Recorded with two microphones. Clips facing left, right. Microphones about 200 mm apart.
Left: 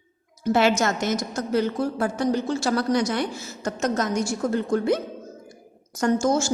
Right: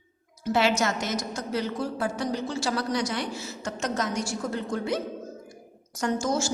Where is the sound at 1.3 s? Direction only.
50° left (ahead or behind).